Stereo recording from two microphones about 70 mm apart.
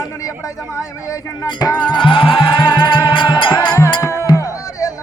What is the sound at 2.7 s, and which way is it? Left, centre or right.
Music, left.